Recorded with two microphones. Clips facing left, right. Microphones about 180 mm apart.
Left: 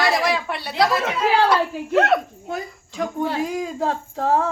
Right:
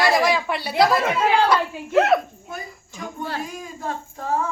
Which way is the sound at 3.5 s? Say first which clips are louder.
Left 7 dB; 80° left.